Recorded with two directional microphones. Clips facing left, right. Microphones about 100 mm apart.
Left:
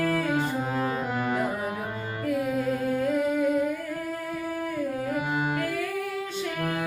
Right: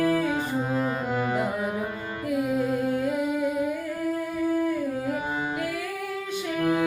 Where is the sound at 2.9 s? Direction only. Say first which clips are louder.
Left 1 dB; 15° right (ahead or behind).